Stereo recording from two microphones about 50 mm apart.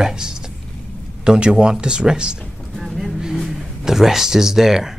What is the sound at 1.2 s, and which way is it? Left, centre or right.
Speech, centre.